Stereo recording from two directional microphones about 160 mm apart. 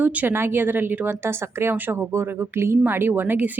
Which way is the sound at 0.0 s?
10° right (ahead or behind).